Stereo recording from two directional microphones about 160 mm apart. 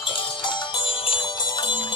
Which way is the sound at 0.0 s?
30° left (ahead or behind).